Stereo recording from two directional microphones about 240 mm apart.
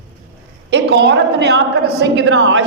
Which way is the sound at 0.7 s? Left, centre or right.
Right.